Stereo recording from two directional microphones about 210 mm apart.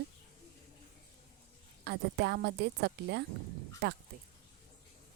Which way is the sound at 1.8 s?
55° right (ahead or behind).